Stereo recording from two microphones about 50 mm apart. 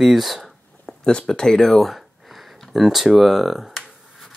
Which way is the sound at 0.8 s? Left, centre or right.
Centre.